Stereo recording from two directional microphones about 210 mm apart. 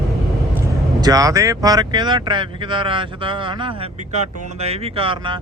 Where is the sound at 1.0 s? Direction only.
15° right (ahead or behind).